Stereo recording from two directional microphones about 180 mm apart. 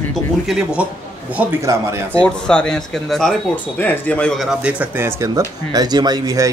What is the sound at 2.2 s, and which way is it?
Speech, 5° left (ahead or behind).